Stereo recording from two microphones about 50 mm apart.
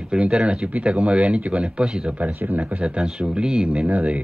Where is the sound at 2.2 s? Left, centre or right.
Right.